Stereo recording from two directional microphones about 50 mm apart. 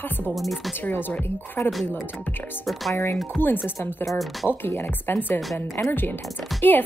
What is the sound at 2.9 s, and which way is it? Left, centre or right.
Speech, left.